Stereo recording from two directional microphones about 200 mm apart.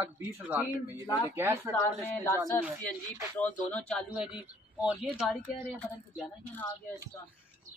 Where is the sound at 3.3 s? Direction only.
10° left (ahead or behind).